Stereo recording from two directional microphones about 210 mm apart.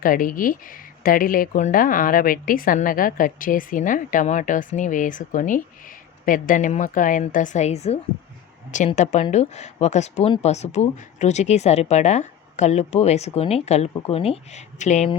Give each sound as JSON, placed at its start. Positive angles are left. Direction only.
{"t": 0.0, "sound": "speech", "side_deg": 40}